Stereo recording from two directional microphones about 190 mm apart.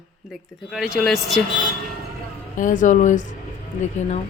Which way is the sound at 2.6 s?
40° left (ahead or behind).